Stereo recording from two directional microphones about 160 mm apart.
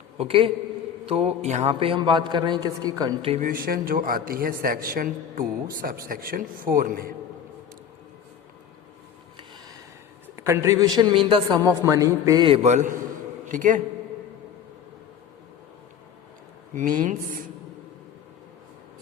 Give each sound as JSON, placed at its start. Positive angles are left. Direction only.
{"t": 0.2, "sound": "a man's voice", "side_deg": -35}
{"t": 3.2, "sound": "a man's voice", "side_deg": -40}
{"t": 3.4, "sound": "a man's voice", "side_deg": -65}
{"t": 10.3, "sound": "a man's voice", "side_deg": -15}
{"t": 11.4, "sound": "a man's voice", "side_deg": -20}
{"t": 12.5, "sound": "a man's voice", "side_deg": -45}
{"t": 16.7, "sound": "a man's voice", "side_deg": -60}